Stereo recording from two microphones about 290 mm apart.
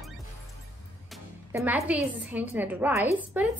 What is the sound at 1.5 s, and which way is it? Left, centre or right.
A woman's voice, centre.